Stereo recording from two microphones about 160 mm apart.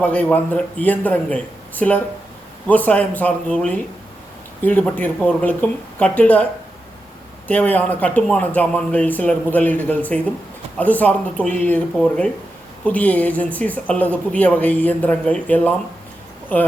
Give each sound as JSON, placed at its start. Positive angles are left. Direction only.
{"t": 0.0, "sound": "a woman's voice", "side_deg": 10}